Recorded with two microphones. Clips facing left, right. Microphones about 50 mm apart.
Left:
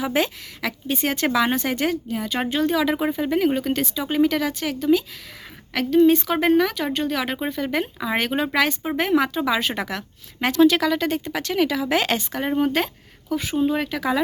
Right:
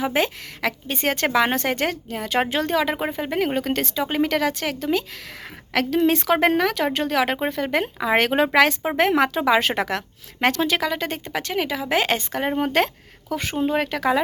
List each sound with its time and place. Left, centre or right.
0.0 s a woman's voice: right
2.5 s a woman's voice: right
3.1 s a woman's voice: right
5.7 s a woman's voice: right
7.3 s a woman's voice: right
8.2 s speech: right
10.6 s speech: right
12.6 s speech: right